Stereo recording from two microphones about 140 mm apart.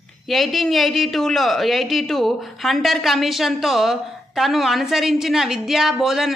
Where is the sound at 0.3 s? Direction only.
Centre (ahead or behind).